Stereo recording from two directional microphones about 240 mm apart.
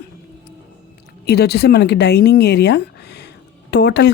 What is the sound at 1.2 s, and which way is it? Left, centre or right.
Speech, left.